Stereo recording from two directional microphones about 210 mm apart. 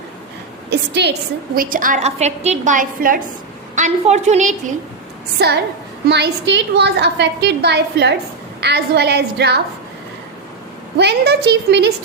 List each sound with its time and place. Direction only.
0.7 s a woman's voice: 55° right (ahead or behind)
1.5 s a woman's voice: 40° right (ahead or behind)
5.4 s a woman's voice: 50° right (ahead or behind)
10.9 s a woman's voice: 50° right (ahead or behind)